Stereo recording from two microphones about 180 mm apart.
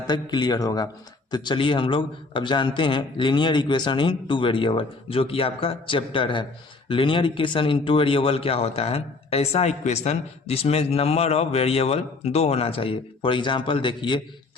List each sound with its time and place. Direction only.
0.1 s a man's voice: 25° left (ahead or behind)